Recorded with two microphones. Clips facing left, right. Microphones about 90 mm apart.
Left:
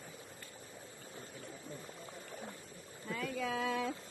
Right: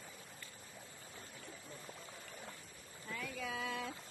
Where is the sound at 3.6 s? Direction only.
90° left.